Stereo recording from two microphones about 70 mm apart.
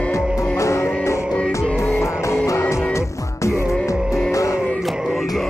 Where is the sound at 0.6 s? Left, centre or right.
Left.